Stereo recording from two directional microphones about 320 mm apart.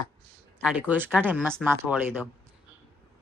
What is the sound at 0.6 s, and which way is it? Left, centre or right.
Speech, centre.